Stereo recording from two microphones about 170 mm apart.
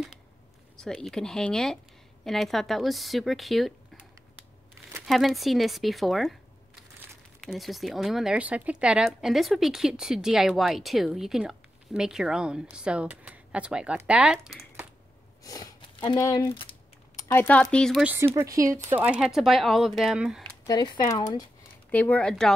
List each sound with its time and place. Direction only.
0.7 s speech: 5° left (ahead or behind)
5.0 s speech: centre (ahead or behind)
7.3 s speech: centre (ahead or behind)
15.4 s speech: 20° left (ahead or behind); by 18.0 s 5° left (ahead or behind)
18.0 s speech: 15° right (ahead or behind)
20.6 s speech: 25° left (ahead or behind)
21.9 s speech: 10° left (ahead or behind)